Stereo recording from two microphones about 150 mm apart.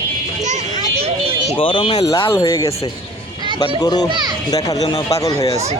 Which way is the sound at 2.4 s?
25° left (ahead or behind).